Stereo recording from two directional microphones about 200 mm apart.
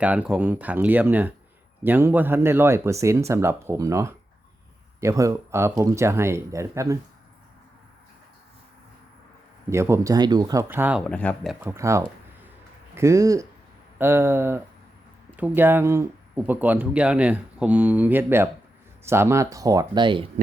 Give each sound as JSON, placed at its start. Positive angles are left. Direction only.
{"t": 0.0, "sound": "speech", "side_deg": -5}
{"t": 9.6, "sound": "speech", "side_deg": -15}
{"t": 11.0, "sound": "speech", "side_deg": 5}
{"t": 11.6, "sound": "speech", "side_deg": -15}